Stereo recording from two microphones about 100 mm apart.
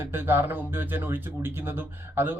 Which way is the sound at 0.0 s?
25° right (ahead or behind).